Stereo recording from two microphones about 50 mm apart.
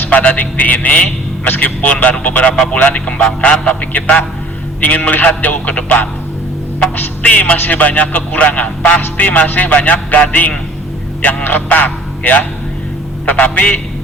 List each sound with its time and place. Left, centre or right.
0.0 s a man's voice: left
1.5 s music: left
3.1 s a man's voice: centre
4.8 s music: left
7.2 s a man's voice: left
7.6 s music: left
11.4 s a man's voice: left